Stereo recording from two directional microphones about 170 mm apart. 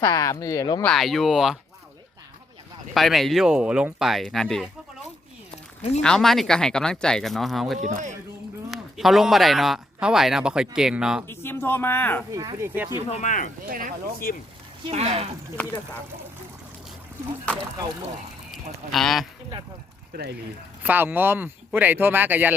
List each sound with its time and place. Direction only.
0.0 s speech: 20° left (ahead or behind)
0.9 s speech: centre (ahead or behind)
2.9 s speech: centre (ahead or behind)
6.0 s speech: 5° left (ahead or behind)
7.8 s speech: 45° right (ahead or behind)
8.7 s speech: centre (ahead or behind)
11.3 s speech: 15° left (ahead or behind)
12.3 s speech: 20° right (ahead or behind)
13.1 s speech: 45° left (ahead or behind)
13.7 s speech: 55° right (ahead or behind)
14.2 s speech: 60° left (ahead or behind)
14.8 s speech: 35° right (ahead or behind)
18.5 s speech: centre (ahead or behind)
20.8 s speech: 10° right (ahead or behind)